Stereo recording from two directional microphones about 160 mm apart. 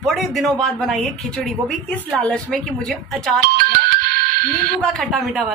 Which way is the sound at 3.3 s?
70° right (ahead or behind).